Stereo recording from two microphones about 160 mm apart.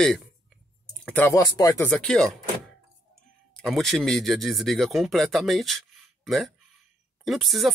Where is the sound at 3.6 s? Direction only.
Centre (ahead or behind).